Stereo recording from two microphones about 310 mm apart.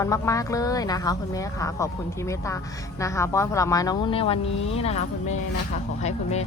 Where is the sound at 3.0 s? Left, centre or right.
Centre.